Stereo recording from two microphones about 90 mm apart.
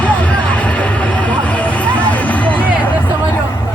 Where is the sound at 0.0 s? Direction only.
15° left (ahead or behind).